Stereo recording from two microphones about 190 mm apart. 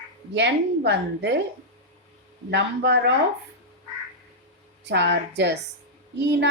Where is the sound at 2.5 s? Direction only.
65° right (ahead or behind).